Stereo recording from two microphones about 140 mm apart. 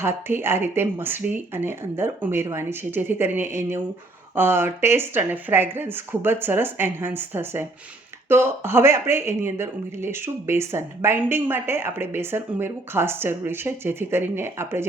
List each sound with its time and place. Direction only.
0.0 s speech: 15° right (ahead or behind)